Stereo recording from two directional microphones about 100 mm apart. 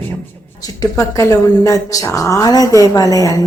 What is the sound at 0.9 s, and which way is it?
A woman's voice, 30° left (ahead or behind).